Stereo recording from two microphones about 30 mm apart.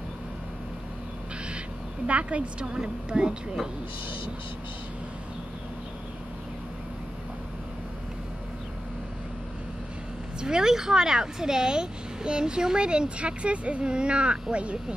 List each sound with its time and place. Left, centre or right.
2.0 s a woman's voice: right
2.6 s speech: right
10.4 s speech: centre; by 15.0 s right